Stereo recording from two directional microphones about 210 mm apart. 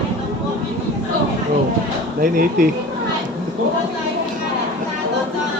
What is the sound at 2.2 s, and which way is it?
Speech, 40° right (ahead or behind).